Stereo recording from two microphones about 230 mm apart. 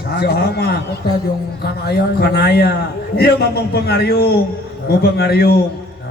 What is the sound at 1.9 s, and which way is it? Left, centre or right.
Speech, left.